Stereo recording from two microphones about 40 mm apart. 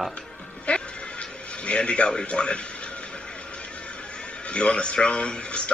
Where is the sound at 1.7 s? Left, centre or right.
Left.